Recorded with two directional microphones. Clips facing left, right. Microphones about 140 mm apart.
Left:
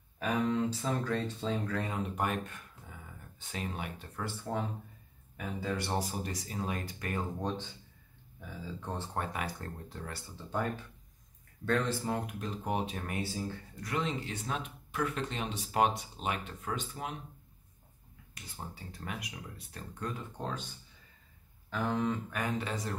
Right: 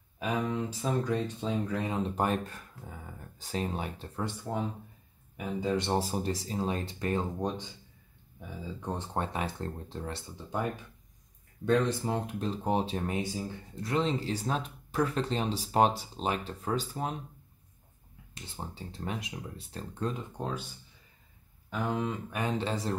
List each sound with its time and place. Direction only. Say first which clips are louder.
0.2 s speech: left 1 dB; 10° right (ahead or behind)
2.0 s speech: right 4 dB; 30° right (ahead or behind)
7.3 s speech: right 2 dB; 15° right (ahead or behind)
12.3 s speech: right 5 dB; 30° right (ahead or behind)
13.7 s speech: right 6 dB; 30° right (ahead or behind)
18.3 s speech: right 3 dB; 25° right (ahead or behind)
20.3 s speech: right 3 dB; 10° right (ahead or behind)
21.6 s speech: even; 15° right (ahead or behind); by 22.9 s 30° right (ahead or behind)